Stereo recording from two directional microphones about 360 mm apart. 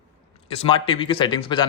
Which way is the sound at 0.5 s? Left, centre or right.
Centre.